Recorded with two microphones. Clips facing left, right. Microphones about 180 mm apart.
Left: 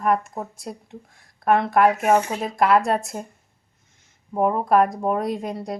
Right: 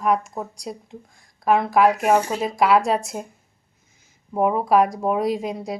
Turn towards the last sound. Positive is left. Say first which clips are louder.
# right 2 dB
turn(degrees=0)  # may be behind; listen again after turning